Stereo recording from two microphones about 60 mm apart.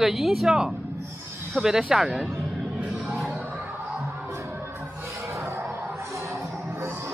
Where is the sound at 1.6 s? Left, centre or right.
Centre.